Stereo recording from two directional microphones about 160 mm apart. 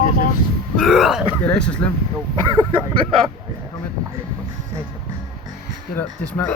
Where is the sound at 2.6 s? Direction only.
30° right (ahead or behind).